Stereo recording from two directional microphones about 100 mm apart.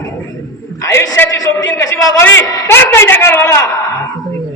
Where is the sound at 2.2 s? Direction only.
20° left (ahead or behind).